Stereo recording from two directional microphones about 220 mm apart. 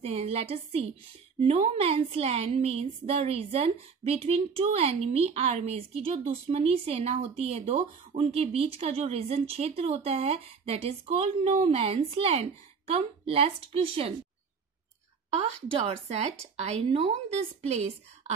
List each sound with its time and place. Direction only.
0.0 s a woman's voice: 30° right (ahead or behind)
15.3 s a woman's voice: 30° right (ahead or behind)